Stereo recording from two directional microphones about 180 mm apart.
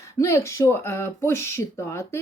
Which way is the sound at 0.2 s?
15° left (ahead or behind).